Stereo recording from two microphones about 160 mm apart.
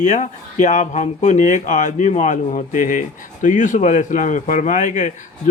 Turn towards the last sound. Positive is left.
turn(degrees=50)  # may be behind; listen again after turning